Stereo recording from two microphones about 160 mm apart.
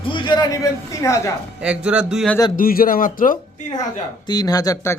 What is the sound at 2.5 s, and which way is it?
Speech, 65° left (ahead or behind).